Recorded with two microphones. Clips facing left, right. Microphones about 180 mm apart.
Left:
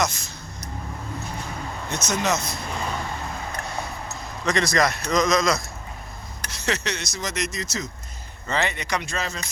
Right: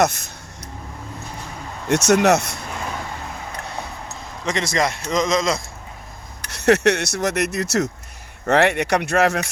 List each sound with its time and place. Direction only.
0.0 s speech: 60° right (ahead or behind)
1.9 s speech: 70° right (ahead or behind)
4.4 s a man's voice: 25° right (ahead or behind)
6.5 s speech: 65° right (ahead or behind)